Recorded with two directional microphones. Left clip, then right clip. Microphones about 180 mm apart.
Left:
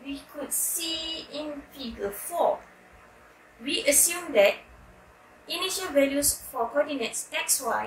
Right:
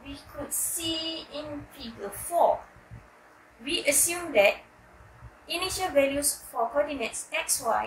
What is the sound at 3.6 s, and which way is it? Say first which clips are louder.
A woman's voice: left 2 dB; 15° left (ahead or behind).